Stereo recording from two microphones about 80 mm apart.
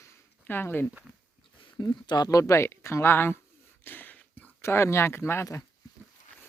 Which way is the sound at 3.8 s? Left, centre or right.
Left.